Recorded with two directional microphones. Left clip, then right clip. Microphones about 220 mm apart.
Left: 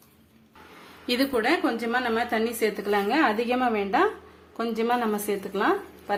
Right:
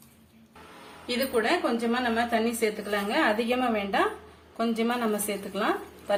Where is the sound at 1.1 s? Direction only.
50° left (ahead or behind).